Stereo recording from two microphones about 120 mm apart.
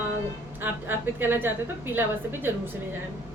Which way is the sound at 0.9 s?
20° right (ahead or behind).